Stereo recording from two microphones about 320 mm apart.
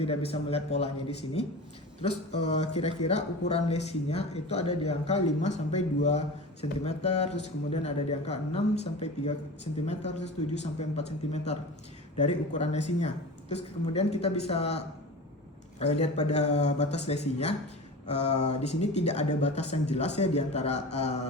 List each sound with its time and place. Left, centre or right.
0.0 s a man's voice: centre
2.0 s speech: left
15.8 s speech: left